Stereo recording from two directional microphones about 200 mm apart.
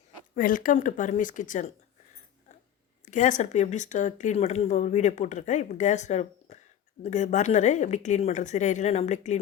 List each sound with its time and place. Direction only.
0.3 s speech: 45° left (ahead or behind)
3.1 s speech: 40° left (ahead or behind)